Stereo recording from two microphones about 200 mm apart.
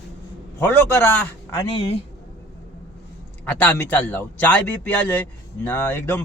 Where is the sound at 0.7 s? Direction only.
10° left (ahead or behind).